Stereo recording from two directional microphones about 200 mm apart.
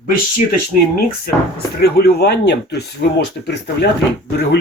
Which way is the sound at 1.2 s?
50° left (ahead or behind).